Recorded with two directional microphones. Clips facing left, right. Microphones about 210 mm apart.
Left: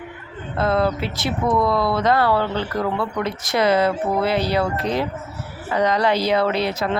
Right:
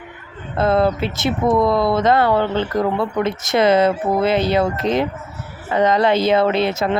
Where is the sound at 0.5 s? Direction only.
25° right (ahead or behind).